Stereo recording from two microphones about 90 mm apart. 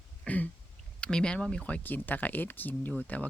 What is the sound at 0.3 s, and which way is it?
Throat clearing, 15° left (ahead or behind).